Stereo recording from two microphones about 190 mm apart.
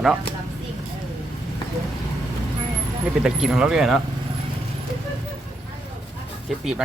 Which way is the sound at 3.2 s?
5° right (ahead or behind).